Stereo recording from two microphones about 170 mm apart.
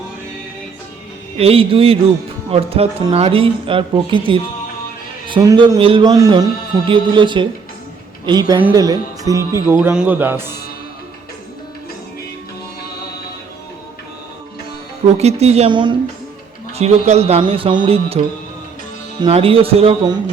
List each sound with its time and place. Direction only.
1.4 s a man's voice: 35° right (ahead or behind); by 10.5 s 15° right (ahead or behind)
15.0 s speech: 40° right (ahead or behind)
16.7 s speech: 40° right (ahead or behind)
19.2 s speech: 35° right (ahead or behind)